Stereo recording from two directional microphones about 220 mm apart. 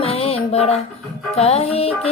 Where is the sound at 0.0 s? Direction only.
30° left (ahead or behind).